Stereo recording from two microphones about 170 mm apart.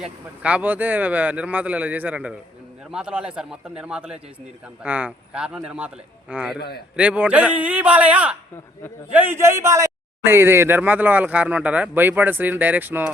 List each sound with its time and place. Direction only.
0.0 s a man's voice: 5° right (ahead or behind)
6.6 s a man's voice: 65° left (ahead or behind)
6.9 s speech: 5° right (ahead or behind)